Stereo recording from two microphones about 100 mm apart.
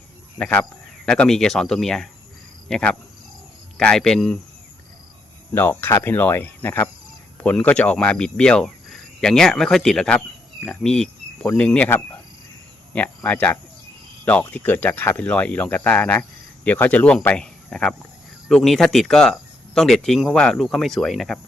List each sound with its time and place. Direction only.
0.3 s speech: 10° left (ahead or behind)
5.5 s speech: 20° left (ahead or behind)
7.3 s cricket: 15° left (ahead or behind)
10.7 s speech: 5° left (ahead or behind)
12.9 s cricket: 15° left (ahead or behind)
14.3 s speech: 15° left (ahead or behind)